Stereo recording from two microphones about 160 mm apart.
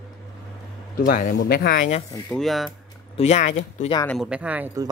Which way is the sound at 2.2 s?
Centre (ahead or behind).